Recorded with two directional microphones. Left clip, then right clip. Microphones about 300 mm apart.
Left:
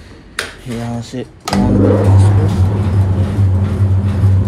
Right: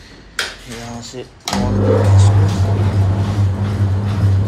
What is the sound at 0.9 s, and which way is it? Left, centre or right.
Speech, left.